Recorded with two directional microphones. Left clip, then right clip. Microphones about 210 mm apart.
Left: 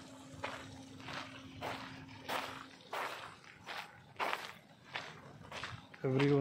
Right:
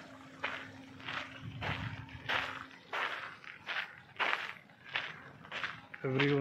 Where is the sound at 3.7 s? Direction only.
5° left (ahead or behind).